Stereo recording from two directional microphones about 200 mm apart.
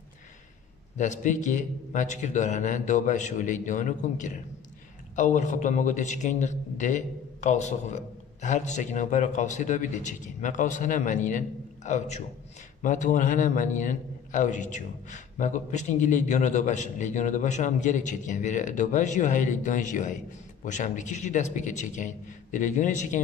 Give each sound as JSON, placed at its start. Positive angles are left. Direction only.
{"t": 0.9, "sound": "a man's voice", "side_deg": 40}